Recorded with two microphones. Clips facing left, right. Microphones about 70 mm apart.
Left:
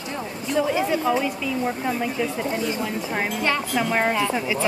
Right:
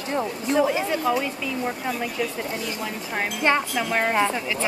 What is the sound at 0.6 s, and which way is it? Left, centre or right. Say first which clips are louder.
Speech: left 1 dB; centre.